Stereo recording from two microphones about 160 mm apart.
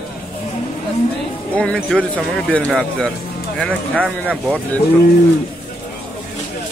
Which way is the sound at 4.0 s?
10° right (ahead or behind).